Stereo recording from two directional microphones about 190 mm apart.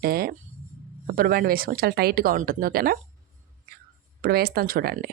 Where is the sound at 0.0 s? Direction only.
50° right (ahead or behind).